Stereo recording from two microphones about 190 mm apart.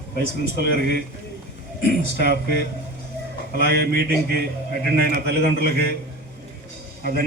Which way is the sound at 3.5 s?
55° right (ahead or behind).